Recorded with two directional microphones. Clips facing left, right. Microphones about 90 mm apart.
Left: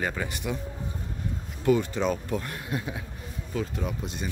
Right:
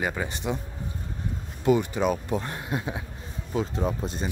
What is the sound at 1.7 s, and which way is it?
A man's voice, 15° right (ahead or behind).